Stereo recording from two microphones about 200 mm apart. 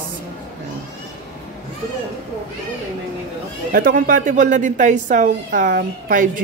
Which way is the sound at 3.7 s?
45° right (ahead or behind).